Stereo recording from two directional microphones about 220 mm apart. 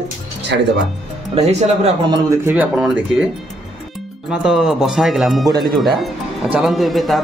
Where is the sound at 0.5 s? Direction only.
50° right (ahead or behind).